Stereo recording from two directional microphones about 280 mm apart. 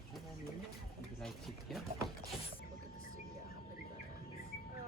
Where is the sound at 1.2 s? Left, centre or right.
Centre.